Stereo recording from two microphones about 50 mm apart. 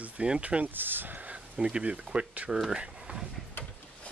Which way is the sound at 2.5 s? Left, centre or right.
Centre.